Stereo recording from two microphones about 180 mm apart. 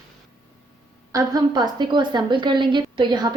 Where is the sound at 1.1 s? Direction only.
20° right (ahead or behind).